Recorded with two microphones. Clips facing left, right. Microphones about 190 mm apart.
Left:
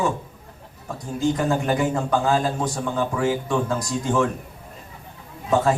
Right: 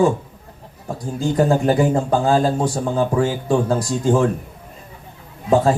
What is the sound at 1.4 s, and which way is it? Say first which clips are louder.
Speech: right 6 dB; 35° right (ahead or behind).